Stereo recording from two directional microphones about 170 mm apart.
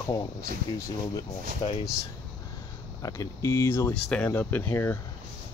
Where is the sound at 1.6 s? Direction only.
30° left (ahead or behind).